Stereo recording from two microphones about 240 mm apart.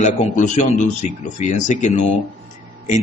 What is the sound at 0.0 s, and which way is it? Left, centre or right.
A man's voice, left.